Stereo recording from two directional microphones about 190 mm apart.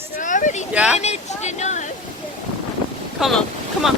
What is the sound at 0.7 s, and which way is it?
Speech, 5° right (ahead or behind).